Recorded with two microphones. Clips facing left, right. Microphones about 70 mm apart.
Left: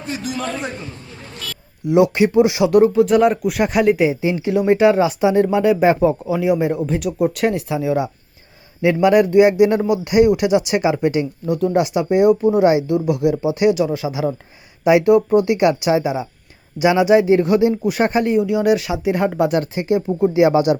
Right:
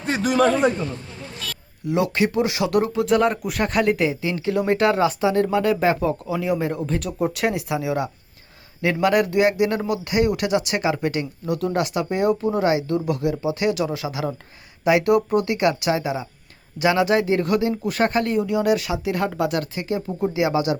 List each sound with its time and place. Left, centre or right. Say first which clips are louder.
0.1 s a sound: right 7 dB; right
1.8 s speech: left 7 dB; centre
7.3 s speech: left 2 dB; centre
11.4 s speech: left 5 dB; centre
13.7 s speech: left 5 dB; centre
15.4 s speech: left 5 dB; centre
18.9 s speech: left 5 dB; left